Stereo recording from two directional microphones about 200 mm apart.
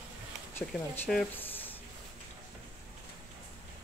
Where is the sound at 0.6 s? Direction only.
10° left (ahead or behind).